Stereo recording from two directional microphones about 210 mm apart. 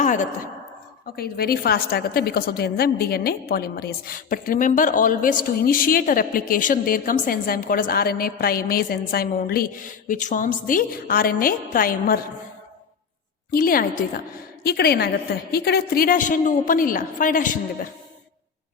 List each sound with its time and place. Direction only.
0.0 s a sound: 35° left (ahead or behind)
1.1 s a woman's voice: 45° left (ahead or behind)
13.5 s a woman's voice: 40° left (ahead or behind)